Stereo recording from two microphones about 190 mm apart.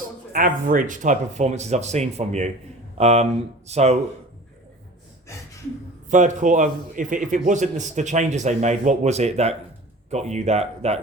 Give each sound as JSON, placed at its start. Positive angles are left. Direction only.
{"t": 0.3, "sound": "a man's voice", "side_deg": -45}
{"t": 6.1, "sound": "a man's voice", "side_deg": -40}